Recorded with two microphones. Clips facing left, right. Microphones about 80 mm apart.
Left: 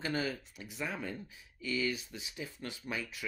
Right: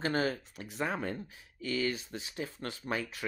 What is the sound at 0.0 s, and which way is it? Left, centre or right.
Speech, right.